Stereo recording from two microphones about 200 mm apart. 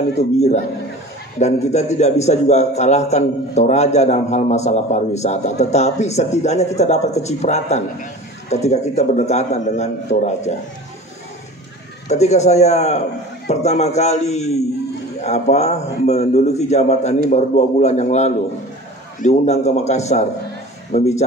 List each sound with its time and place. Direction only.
0.2 s a man's voice: 35° left (ahead or behind)
12.1 s a man's voice: 35° left (ahead or behind)